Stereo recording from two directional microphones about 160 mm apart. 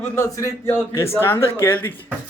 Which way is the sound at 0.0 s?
15° left (ahead or behind).